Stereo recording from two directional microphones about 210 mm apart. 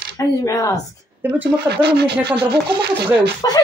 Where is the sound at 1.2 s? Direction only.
10° right (ahead or behind).